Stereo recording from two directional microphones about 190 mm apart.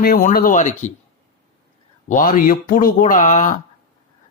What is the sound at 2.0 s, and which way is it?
Speech, 40° left (ahead or behind).